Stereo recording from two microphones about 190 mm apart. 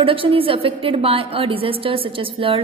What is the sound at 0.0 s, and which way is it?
A woman's voice, 30° right (ahead or behind).